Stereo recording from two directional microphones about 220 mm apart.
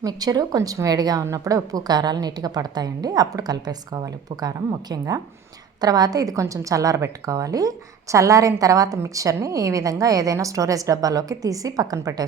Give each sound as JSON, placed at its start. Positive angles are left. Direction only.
{"t": 0.0, "sound": "a woman's voice", "side_deg": -15}